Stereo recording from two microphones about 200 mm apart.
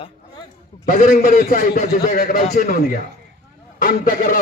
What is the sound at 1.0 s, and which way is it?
A man's voice, 40° left (ahead or behind).